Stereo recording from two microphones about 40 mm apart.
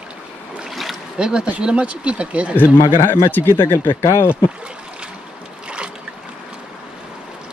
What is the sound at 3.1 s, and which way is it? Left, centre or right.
Speech, left.